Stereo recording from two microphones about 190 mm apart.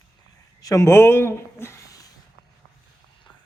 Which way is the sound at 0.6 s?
15° left (ahead or behind).